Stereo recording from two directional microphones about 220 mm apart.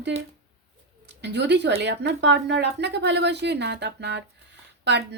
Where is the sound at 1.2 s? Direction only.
50° right (ahead or behind).